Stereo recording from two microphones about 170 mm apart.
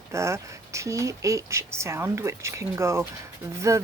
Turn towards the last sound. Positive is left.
turn(degrees=-20)  # may be behind; listen again after turning